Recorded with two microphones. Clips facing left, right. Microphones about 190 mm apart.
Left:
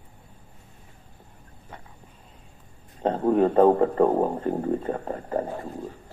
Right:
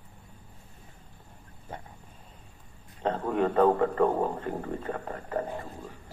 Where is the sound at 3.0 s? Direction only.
35° left (ahead or behind).